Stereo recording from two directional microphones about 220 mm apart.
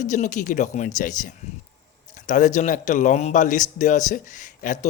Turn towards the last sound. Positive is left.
turn(degrees=35)  # may be behind; listen again after turning